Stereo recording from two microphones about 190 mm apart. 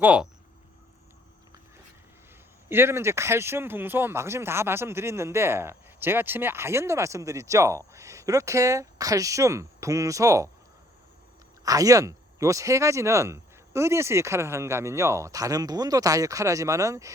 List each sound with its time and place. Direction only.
0.0 s speech: 5° right (ahead or behind)
2.6 s speech: 10° right (ahead or behind)
11.6 s speech: 20° right (ahead or behind)